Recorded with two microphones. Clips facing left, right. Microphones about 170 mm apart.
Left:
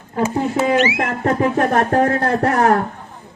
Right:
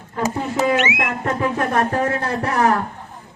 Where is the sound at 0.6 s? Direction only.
35° left (ahead or behind); by 2.7 s 55° left (ahead or behind).